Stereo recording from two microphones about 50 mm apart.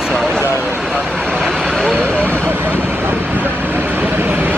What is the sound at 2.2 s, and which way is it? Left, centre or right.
Vehicle, right.